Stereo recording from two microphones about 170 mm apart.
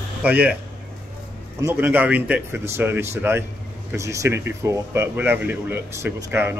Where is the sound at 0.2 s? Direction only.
10° right (ahead or behind).